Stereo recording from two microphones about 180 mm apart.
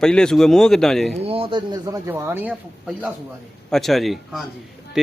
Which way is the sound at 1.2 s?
30° right (ahead or behind).